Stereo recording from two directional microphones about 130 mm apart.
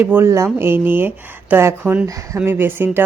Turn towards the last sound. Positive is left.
turn(degrees=-15)  # may be behind; listen again after turning